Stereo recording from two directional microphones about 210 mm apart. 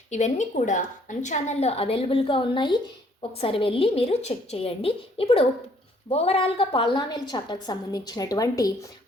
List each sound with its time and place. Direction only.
0.1 s a woman's voice: 35° left (ahead or behind); by 8.9 s 15° left (ahead or behind)